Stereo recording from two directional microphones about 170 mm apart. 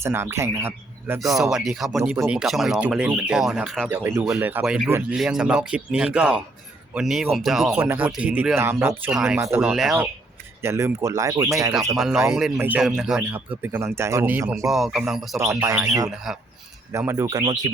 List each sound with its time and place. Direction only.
0.0 s speech: 15° right (ahead or behind)
1.2 s speech: centre (ahead or behind)
2.1 s speech: 15° right (ahead or behind)
2.4 s speech: centre (ahead or behind)
3.8 s speech: 10° right (ahead or behind)
10.6 s speech: 15° right (ahead or behind)
11.9 s speech: centre (ahead or behind)
13.6 s speech: 15° right (ahead or behind)
14.7 s speech: centre (ahead or behind)
15.4 s speech: 20° right (ahead or behind)
16.0 s speech: centre (ahead or behind)
16.9 s speech: 15° right (ahead or behind)